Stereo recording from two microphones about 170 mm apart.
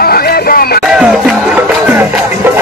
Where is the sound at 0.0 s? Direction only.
65° left (ahead or behind).